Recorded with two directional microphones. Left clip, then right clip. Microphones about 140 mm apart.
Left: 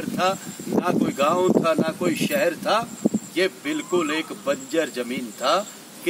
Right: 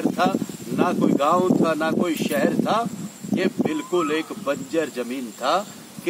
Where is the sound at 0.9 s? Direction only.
10° left (ahead or behind).